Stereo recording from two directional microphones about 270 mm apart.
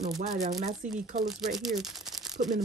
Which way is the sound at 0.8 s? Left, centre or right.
Centre.